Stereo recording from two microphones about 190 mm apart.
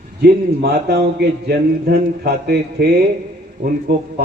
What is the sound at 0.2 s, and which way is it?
A man's voice, 60° right (ahead or behind).